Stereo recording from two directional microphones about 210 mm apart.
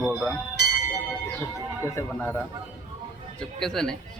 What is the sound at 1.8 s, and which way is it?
Speech, 15° left (ahead or behind).